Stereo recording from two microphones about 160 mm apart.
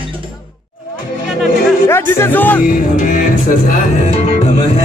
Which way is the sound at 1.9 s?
15° left (ahead or behind).